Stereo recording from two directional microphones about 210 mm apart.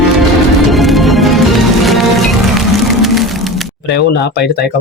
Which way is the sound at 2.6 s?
Centre (ahead or behind).